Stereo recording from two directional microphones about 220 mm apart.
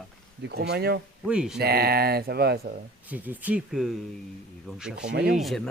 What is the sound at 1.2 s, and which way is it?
Speech, 5° right (ahead or behind).